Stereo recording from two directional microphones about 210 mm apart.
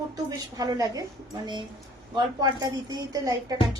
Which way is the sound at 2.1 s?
20° right (ahead or behind).